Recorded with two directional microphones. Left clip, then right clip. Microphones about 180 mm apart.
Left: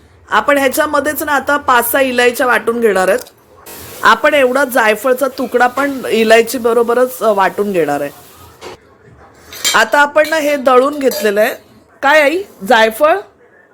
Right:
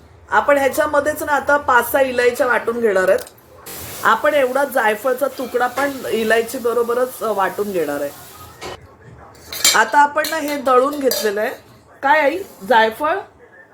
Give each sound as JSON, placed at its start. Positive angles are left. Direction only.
{"t": 0.3, "sound": "speech", "side_deg": 55}
{"t": 9.7, "sound": "a woman's voice", "side_deg": 55}